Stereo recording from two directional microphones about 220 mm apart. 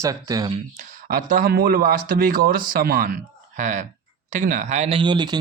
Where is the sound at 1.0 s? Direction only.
40° right (ahead or behind).